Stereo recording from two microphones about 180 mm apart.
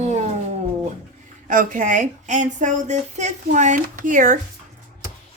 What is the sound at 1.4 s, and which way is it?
Speech, 50° right (ahead or behind).